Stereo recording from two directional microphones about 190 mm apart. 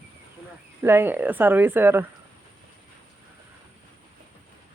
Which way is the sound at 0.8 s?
10° right (ahead or behind).